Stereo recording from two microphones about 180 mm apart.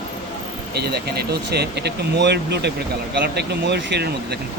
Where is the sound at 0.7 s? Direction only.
65° right (ahead or behind).